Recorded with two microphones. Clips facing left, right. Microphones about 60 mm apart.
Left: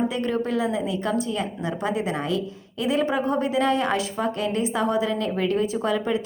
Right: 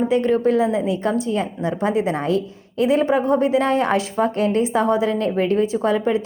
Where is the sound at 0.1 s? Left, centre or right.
Right.